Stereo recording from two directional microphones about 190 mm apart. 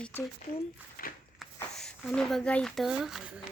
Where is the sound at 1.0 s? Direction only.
50° left (ahead or behind).